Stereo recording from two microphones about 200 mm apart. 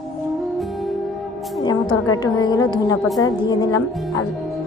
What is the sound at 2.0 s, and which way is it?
A woman's voice, 20° left (ahead or behind).